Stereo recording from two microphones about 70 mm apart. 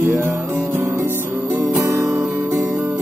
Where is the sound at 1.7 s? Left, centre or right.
Right.